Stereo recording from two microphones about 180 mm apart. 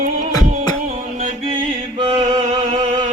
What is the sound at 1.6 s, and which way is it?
Music, 25° right (ahead or behind).